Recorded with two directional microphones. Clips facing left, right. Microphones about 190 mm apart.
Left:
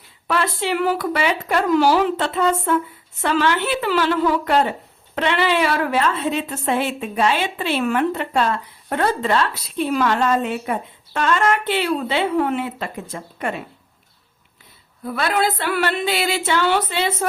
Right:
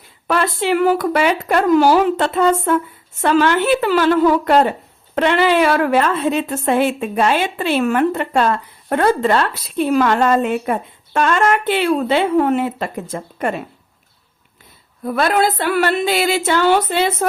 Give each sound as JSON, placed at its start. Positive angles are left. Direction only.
{"t": 0.3, "sound": "a woman's voice", "side_deg": -50}
{"t": 15.0, "sound": "a woman's voice", "side_deg": -45}